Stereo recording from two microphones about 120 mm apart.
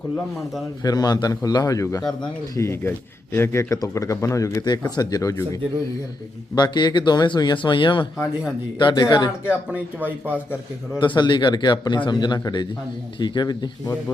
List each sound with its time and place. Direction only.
0.8 s speech: 35° left (ahead or behind)
6.6 s speech: 35° left (ahead or behind)
10.0 s speech: 15° right (ahead or behind)
11.0 s speech: 40° left (ahead or behind)